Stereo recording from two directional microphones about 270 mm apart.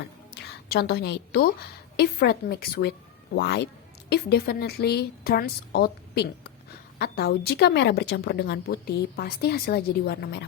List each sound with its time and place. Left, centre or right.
0.3 s a woman's voice: left